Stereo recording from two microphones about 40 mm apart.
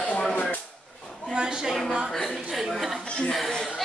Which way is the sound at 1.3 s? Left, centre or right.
Centre.